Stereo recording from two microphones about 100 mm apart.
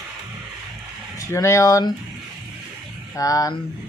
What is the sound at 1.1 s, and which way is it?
Speech, 30° left (ahead or behind).